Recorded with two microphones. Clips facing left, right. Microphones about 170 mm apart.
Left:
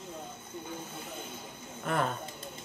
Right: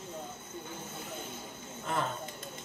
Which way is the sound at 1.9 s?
60° left (ahead or behind).